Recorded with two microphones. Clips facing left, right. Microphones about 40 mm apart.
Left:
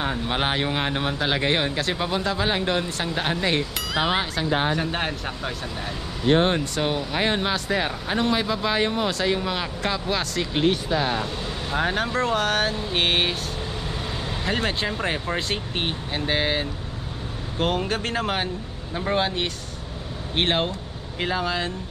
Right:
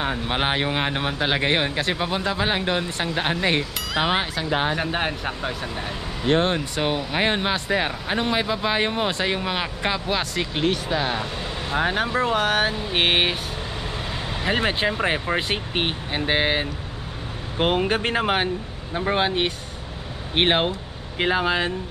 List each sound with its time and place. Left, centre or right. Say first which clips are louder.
0.0 s speech: right 1 dB; centre
10.5 s speech: left 2 dB; centre
10.9 s speech: even; centre
14.4 s speech: right 4 dB; centre